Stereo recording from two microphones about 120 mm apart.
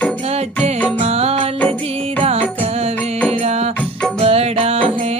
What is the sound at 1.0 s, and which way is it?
Music, 60° right (ahead or behind).